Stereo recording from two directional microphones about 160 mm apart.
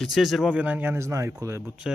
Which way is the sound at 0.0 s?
Centre (ahead or behind).